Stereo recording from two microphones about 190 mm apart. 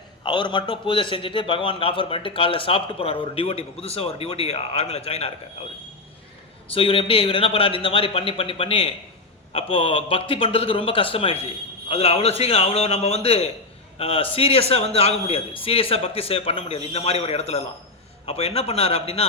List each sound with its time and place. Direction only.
0.2 s a man's voice: 25° left (ahead or behind)
6.7 s a man's voice: 30° left (ahead or behind)